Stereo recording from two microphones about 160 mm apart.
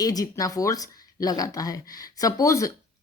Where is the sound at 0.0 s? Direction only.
25° left (ahead or behind).